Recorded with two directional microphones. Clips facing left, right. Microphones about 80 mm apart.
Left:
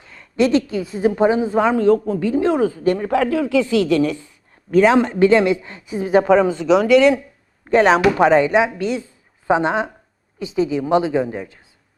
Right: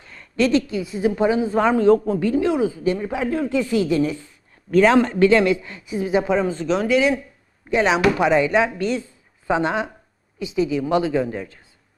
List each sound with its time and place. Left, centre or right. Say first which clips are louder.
0.0 s a sound: even; centre
0.3 s a woman's voice: left 2 dB; left
1.5 s a man's voice: left 1 dB; centre
1.8 s speech: even; right
2.3 s speech: left 5 dB; left
3.0 s speech: left 5 dB; left
4.7 s speech: left 2 dB; centre
4.9 s speech: left 1 dB; left
6.1 s speech: left 7 dB; left
7.6 s speech: left 4 dB; left
8.8 s speech: left 1 dB; centre
9.5 s speech: left 3 dB; left